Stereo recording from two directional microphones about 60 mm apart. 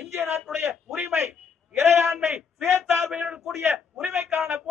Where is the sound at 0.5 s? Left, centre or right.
Right.